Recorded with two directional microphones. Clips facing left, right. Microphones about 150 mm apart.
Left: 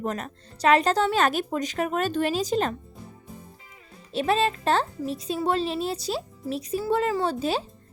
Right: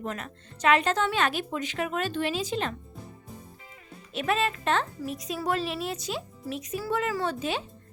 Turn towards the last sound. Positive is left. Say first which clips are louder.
# left 4 dB
turn(degrees=35)  # may be behind; listen again after turning